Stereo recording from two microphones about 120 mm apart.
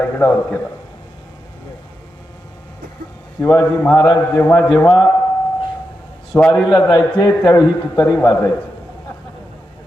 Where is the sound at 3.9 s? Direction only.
30° left (ahead or behind).